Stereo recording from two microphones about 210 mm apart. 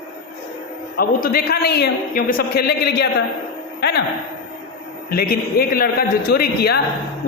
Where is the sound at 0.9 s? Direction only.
45° left (ahead or behind).